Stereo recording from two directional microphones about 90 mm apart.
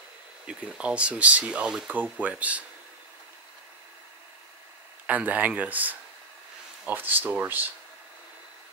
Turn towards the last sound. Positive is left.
turn(degrees=-20)  # may be behind; listen again after turning